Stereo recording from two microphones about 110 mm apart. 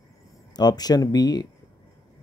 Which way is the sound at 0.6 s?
40° left (ahead or behind).